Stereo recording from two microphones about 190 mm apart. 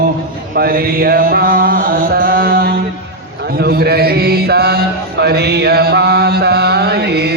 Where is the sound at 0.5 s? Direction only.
50° right (ahead or behind).